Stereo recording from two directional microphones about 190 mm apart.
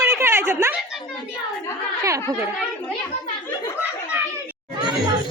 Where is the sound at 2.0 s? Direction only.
15° right (ahead or behind).